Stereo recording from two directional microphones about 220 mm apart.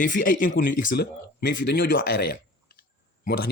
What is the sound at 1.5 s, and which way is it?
Speech, 55° left (ahead or behind).